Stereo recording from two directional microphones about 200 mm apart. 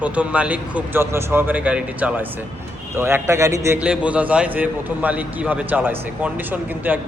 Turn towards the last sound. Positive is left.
turn(degrees=-10)  # may be behind; listen again after turning